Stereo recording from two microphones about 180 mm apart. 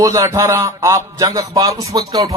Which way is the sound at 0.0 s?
15° right (ahead or behind).